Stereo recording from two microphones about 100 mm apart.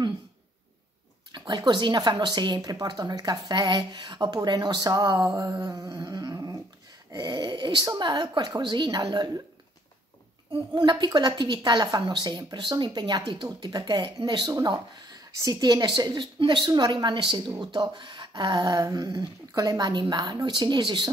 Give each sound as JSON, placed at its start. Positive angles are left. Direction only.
{"t": 1.3, "sound": "a woman's voice", "side_deg": -40}
{"t": 7.1, "sound": "a sound", "side_deg": -35}
{"t": 8.0, "sound": "a woman's voice", "side_deg": -40}
{"t": 10.5, "sound": "a woman's voice", "side_deg": -45}